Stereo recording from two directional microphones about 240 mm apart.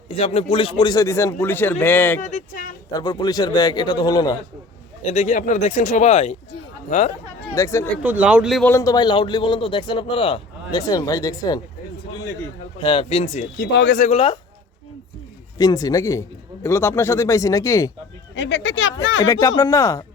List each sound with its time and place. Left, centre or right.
0.1 s speech: left; by 2.2 s centre
2.2 s speech: left
3.0 s speech: centre
5.0 s a man's voice: left
7.5 s speech: centre
8.0 s speech: centre
8.7 s a man's voice: centre
12.8 s a man's voice: left
13.6 s speech: left
14.1 s a man's voice: left
15.5 s speech: centre
18.3 s speech: left
19.2 s speech: centre